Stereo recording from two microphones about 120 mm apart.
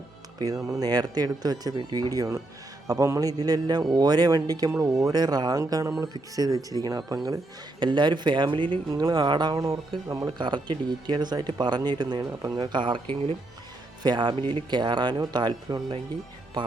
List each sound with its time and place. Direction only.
0.3 s speech: 30° right (ahead or behind)
14.0 s speech: 40° right (ahead or behind)